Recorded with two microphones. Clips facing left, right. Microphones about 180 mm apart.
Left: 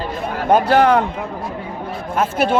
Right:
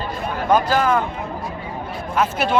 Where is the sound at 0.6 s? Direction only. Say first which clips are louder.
Left 5 dB; 70° left (ahead or behind).